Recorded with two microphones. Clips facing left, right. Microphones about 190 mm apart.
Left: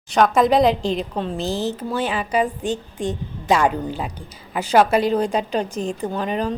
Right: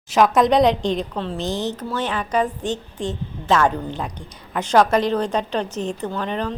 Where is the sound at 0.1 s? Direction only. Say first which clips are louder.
Even; centre (ahead or behind).